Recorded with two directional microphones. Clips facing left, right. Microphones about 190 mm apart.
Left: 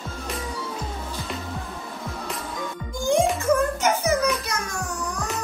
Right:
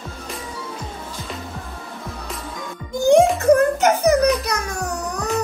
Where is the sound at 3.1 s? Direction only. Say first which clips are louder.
Right 7 dB; 65° right (ahead or behind).